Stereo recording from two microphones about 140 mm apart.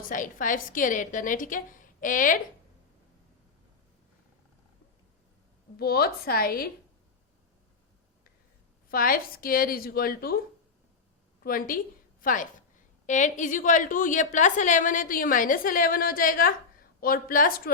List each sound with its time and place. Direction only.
0.1 s a woman's voice: 70° left (ahead or behind)
5.7 s a woman's voice: 90° left
8.9 s a woman's voice: 90° left
11.4 s a woman's voice: 90° left
12.2 s a woman's voice: 70° left (ahead or behind)
13.1 s a woman's voice: 60° left (ahead or behind); by 17.5 s 85° left